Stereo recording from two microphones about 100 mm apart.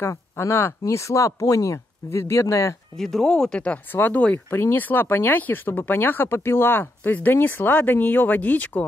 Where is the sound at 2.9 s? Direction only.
5° left (ahead or behind).